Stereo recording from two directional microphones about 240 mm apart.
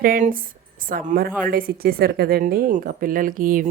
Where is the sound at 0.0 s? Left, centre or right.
Right.